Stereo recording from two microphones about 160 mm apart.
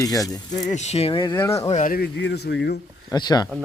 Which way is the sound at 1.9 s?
85° left.